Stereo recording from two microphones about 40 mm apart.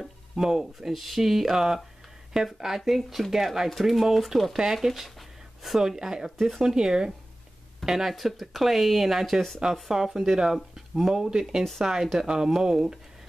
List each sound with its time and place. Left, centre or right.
0.4 s speech: centre
11.1 s speech: centre